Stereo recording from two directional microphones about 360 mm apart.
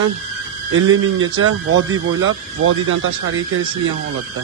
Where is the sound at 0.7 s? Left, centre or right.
Right.